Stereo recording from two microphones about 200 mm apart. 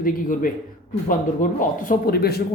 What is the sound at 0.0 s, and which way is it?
Speech, 45° left (ahead or behind).